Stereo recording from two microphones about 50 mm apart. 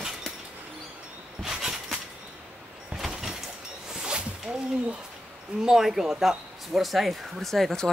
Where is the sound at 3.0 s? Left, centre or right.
Centre.